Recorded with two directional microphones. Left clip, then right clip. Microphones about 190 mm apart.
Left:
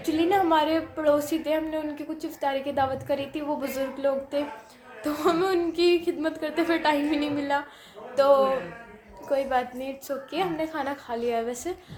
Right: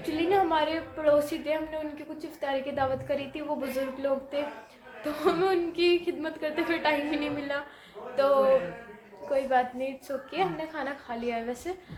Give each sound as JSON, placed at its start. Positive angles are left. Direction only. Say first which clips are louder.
{"t": 0.1, "sound": "a man's voice", "louder": "left 3 dB", "side_deg": 25}